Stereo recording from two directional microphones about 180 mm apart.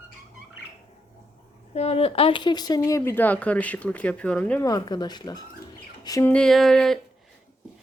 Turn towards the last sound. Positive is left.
turn(degrees=0)  # may be behind; listen again after turning